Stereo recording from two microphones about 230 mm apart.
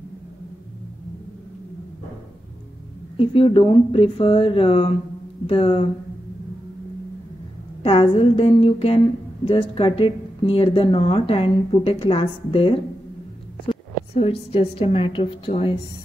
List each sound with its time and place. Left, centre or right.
3.2 s a woman's voice: left
7.8 s a woman's voice: left
14.2 s a woman's voice: left